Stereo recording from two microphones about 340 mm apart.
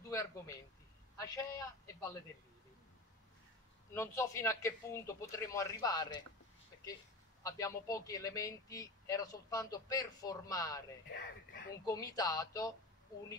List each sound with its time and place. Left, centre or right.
0.1 s a man's voice: centre
3.9 s a man's voice: centre
7.4 s a man's voice: centre
11.1 s speech: left
11.8 s a man's voice: centre